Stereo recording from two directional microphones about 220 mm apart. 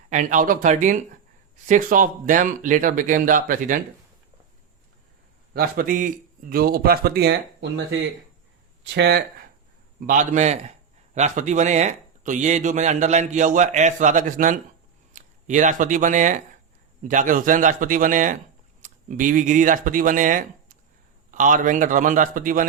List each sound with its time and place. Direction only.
0.1 s speech: 35° right (ahead or behind)
5.5 s speech: 40° right (ahead or behind)
10.1 s speech: 35° right (ahead or behind)